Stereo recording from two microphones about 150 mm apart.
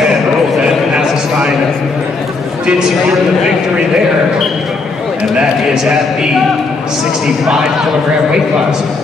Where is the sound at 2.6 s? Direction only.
5° right (ahead or behind).